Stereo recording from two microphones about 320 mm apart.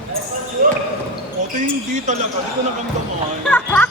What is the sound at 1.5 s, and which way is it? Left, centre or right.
Speech, right.